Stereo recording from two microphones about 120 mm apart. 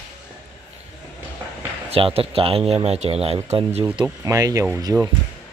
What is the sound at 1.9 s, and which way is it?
A man's voice, 55° right (ahead or behind).